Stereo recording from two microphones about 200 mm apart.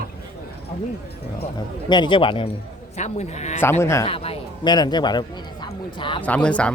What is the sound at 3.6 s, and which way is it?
Speech, 10° left (ahead or behind).